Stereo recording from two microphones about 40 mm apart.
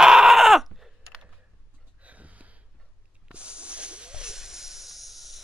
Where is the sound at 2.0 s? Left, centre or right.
Right.